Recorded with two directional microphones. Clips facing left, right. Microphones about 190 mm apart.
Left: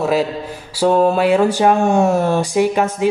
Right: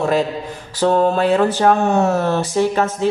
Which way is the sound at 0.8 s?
10° left (ahead or behind).